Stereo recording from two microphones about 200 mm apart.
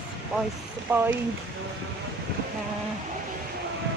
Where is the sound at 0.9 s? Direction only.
10° right (ahead or behind).